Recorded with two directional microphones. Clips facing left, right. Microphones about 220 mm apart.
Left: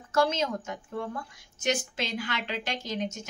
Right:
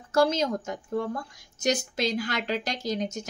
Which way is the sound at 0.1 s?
35° right (ahead or behind).